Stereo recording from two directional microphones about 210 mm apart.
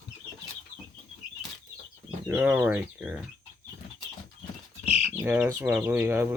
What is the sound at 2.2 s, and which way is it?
Speech, 10° right (ahead or behind).